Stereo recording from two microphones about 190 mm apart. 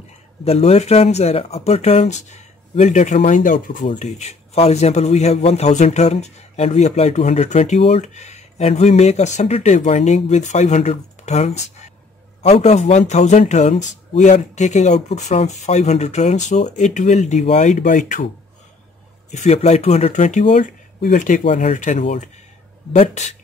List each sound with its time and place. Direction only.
0.5 s a man's voice: 35° left (ahead or behind)
19.3 s a man's voice: 35° left (ahead or behind)